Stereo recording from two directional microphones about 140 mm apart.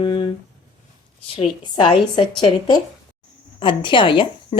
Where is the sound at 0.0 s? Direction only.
35° left (ahead or behind).